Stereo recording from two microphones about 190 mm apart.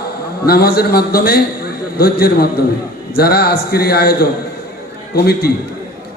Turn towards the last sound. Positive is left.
turn(degrees=55)  # may be behind; listen again after turning